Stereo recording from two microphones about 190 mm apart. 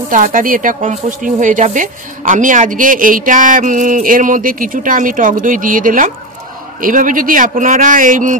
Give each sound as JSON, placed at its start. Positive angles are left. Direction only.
{"t": 0.1, "sound": "speech", "side_deg": -45}